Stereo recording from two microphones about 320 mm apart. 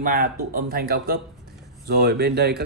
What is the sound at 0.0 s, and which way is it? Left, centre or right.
Speech, right.